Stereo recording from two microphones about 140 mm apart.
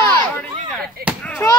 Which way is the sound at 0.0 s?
20° left (ahead or behind).